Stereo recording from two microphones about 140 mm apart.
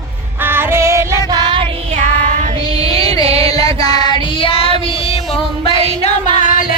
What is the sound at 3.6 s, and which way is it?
Child singing, 30° left (ahead or behind).